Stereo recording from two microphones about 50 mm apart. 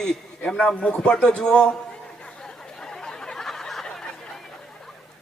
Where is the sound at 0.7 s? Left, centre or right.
Left.